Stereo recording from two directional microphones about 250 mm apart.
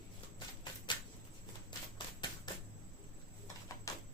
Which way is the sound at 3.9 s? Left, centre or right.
Centre.